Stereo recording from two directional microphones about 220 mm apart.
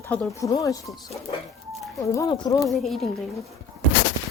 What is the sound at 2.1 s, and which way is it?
Speech, 15° left (ahead or behind).